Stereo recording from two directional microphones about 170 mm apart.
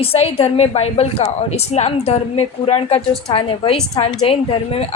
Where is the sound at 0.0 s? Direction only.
35° left (ahead or behind).